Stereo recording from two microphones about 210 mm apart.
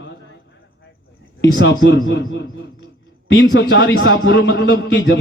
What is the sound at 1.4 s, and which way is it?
A man's voice, 60° left (ahead or behind).